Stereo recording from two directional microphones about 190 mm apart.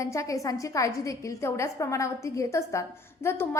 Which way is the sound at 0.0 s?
15° left (ahead or behind).